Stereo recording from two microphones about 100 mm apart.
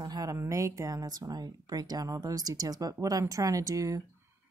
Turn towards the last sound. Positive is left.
turn(degrees=-35)  # may be behind; listen again after turning